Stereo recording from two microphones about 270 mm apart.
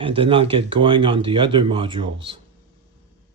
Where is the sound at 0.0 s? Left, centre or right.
Centre.